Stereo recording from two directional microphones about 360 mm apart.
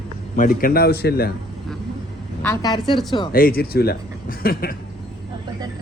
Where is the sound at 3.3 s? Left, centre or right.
Left.